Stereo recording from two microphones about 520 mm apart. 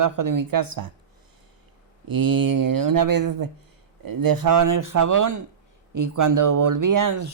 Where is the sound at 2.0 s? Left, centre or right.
Right.